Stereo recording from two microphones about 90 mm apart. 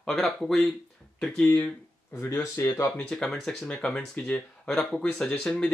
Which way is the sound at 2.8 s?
10° left (ahead or behind).